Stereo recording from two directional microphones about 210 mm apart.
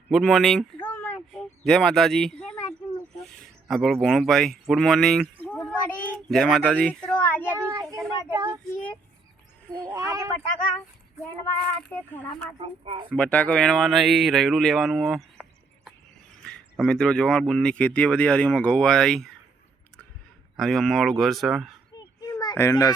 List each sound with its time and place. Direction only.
0.1 s a sound: centre (ahead or behind)
7.7 s child singing: 15° right (ahead or behind)
9.7 s speech: 15° right (ahead or behind)
11.2 s a child's voice: 5° left (ahead or behind)
12.5 s speech: 25° right (ahead or behind)
13.1 s speech: 5° left (ahead or behind)
20.6 s speech: centre (ahead or behind)
21.9 s a sound: 20° left (ahead or behind)